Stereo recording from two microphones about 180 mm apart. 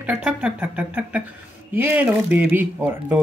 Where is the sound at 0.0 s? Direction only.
10° right (ahead or behind).